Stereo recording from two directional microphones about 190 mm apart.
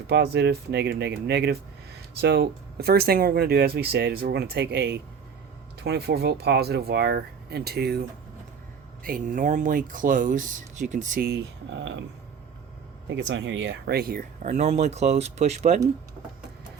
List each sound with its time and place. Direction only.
0.1 s speech: 60° right (ahead or behind)
9.0 s speech: 45° right (ahead or behind)
11.3 s speech: 65° right (ahead or behind)
13.1 s speech: 70° right (ahead or behind); by 15.8 s 35° right (ahead or behind)